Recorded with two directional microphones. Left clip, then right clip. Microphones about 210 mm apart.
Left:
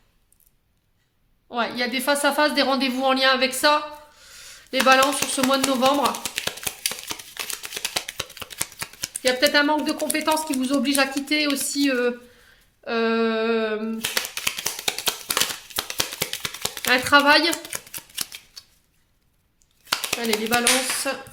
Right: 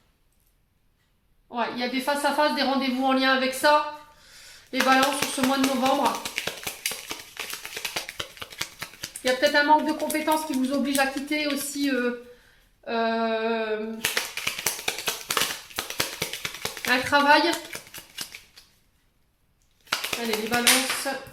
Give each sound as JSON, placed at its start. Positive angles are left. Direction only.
{"t": 1.5, "sound": "speech", "side_deg": 50}
{"t": 4.3, "sound": "a sound", "side_deg": 40}
{"t": 19.9, "sound": "clapping", "side_deg": 35}